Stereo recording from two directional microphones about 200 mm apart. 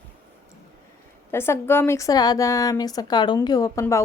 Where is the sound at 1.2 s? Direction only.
10° left (ahead or behind).